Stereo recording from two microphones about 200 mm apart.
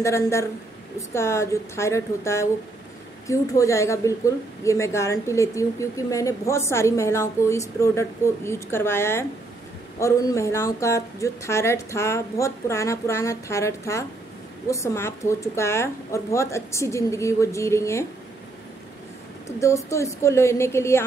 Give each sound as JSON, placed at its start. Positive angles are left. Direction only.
{"t": 0.0, "sound": "a woman's voice", "side_deg": 15}
{"t": 19.4, "sound": "a woman's voice", "side_deg": 15}